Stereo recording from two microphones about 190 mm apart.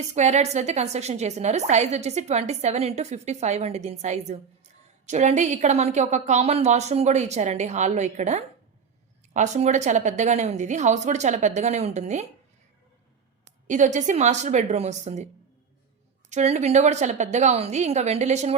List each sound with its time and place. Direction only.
0.1 s a woman's voice: 35° right (ahead or behind)
13.7 s a woman's voice: 40° right (ahead or behind)
16.3 s a woman's voice: 35° right (ahead or behind)